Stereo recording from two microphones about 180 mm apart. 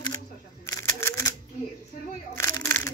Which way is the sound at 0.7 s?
15° left (ahead or behind).